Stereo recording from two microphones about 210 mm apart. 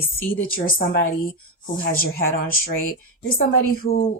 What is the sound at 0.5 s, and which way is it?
Speech, 45° left (ahead or behind).